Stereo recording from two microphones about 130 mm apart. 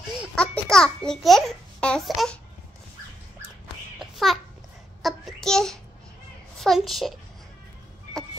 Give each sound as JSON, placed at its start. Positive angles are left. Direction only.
{"t": 0.4, "sound": "a child's voice", "side_deg": 5}
{"t": 4.0, "sound": "babbling", "side_deg": 0}
{"t": 5.0, "sound": "a sound", "side_deg": 0}
{"t": 6.6, "sound": "a child's voice", "side_deg": 0}